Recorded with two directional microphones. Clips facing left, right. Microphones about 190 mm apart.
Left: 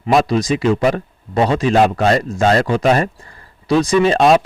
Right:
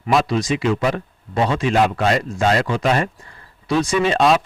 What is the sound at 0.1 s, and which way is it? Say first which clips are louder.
Speech: left 4 dB; 40° left (ahead or behind).